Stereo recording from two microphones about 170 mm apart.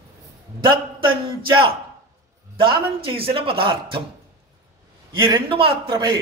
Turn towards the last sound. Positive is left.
turn(degrees=-25)  # may be behind; listen again after turning